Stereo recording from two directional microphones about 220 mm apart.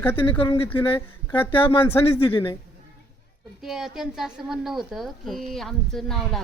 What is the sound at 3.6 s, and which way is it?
Speech, centre (ahead or behind).